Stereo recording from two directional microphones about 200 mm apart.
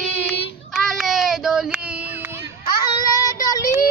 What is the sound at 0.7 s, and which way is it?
Child singing, centre (ahead or behind).